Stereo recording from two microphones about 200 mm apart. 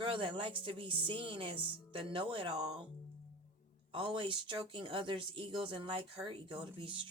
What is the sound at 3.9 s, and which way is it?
Speech, 25° right (ahead or behind).